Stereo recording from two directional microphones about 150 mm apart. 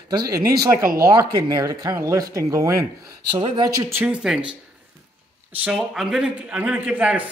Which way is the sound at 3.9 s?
10° right (ahead or behind).